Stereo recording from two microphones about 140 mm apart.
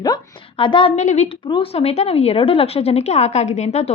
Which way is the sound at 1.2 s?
40° left (ahead or behind).